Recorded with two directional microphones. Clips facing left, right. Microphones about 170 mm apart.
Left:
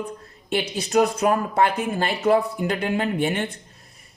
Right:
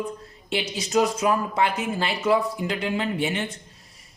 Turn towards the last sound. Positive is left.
turn(degrees=55)  # may be behind; listen again after turning